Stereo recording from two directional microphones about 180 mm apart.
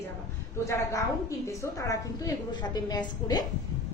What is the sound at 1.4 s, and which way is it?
A woman's voice, 20° left (ahead or behind).